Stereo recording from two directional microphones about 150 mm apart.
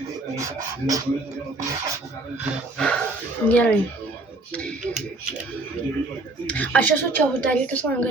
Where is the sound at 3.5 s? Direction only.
10° left (ahead or behind).